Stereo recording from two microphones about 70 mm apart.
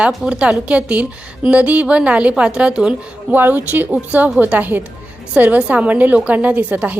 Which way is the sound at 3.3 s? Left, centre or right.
Right.